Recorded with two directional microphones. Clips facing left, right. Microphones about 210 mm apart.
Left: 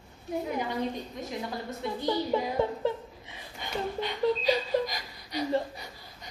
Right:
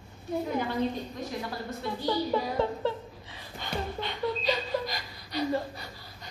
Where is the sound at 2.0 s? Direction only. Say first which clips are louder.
Even; 20° left (ahead or behind).